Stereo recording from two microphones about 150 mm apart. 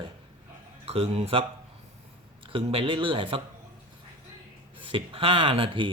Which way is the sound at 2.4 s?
35° right (ahead or behind).